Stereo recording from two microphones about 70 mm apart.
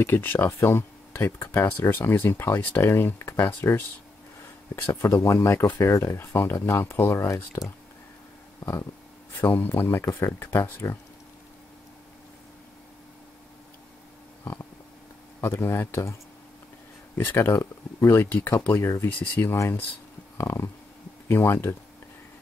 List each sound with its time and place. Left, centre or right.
0.0 s speech: left
5.2 s speech: left
8.5 s a sound: left
9.4 s speech: left
14.4 s stomach rumble: left
15.4 s speech: left
19.0 s speech: left
19.5 s speech: left